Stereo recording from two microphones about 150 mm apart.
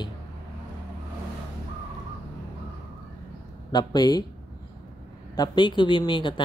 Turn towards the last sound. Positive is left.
turn(degrees=30)  # may be behind; listen again after turning